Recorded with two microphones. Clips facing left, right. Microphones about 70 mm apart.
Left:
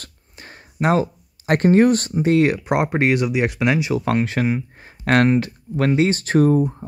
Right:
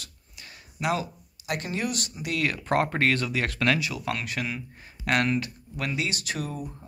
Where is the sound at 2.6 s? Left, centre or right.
Centre.